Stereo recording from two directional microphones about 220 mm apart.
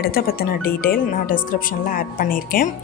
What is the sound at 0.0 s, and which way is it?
A woman's voice, 45° left (ahead or behind).